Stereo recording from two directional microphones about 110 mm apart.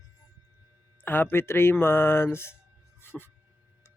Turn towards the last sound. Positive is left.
turn(degrees=20)  # may be behind; listen again after turning